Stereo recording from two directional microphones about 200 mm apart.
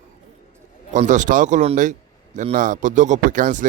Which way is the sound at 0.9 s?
40° right (ahead or behind).